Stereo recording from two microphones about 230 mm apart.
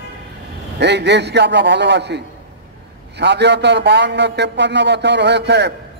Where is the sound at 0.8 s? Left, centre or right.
Right.